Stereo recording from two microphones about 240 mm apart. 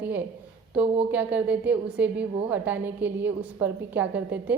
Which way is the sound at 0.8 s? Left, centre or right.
Right.